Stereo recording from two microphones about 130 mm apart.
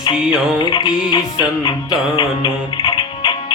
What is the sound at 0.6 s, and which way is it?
Music, 35° left (ahead or behind).